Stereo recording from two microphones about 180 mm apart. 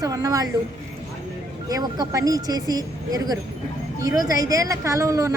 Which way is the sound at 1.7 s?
20° right (ahead or behind).